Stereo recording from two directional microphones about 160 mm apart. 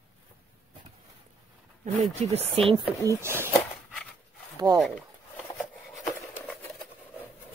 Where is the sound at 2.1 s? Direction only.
45° right (ahead or behind).